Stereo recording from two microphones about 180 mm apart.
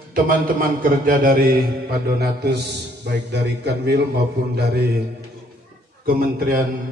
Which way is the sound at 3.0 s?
70° right (ahead or behind).